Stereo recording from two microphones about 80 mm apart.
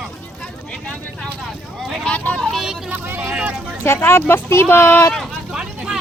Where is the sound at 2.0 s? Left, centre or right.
Centre.